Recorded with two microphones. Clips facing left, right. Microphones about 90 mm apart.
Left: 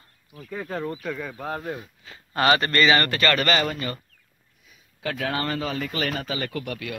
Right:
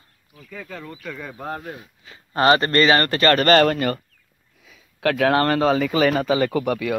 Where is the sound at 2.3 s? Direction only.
30° right (ahead or behind).